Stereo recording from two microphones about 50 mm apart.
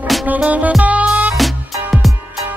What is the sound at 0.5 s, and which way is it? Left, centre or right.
Music, right.